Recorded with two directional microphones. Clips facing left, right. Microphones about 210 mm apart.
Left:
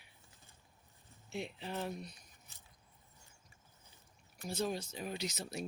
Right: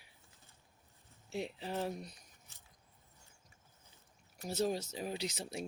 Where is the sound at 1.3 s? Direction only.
35° right (ahead or behind).